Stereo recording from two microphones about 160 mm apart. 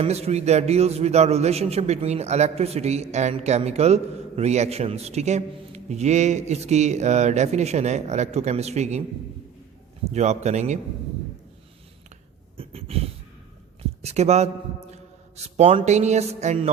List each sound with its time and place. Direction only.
0.0 s a man's voice: 40° right (ahead or behind)
10.1 s a man's voice: 45° right (ahead or behind)
12.5 s a sound: 40° right (ahead or behind)
14.0 s a man's voice: 45° right (ahead or behind)